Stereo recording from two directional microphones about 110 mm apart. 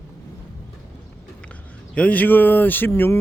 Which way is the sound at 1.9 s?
15° left (ahead or behind).